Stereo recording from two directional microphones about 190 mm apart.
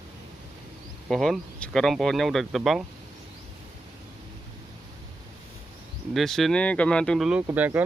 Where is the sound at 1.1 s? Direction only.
Centre (ahead or behind).